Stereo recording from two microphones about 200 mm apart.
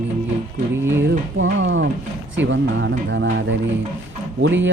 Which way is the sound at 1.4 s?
70° right (ahead or behind).